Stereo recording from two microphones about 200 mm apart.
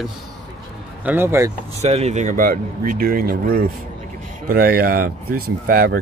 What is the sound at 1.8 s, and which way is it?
Speech, 35° right (ahead or behind).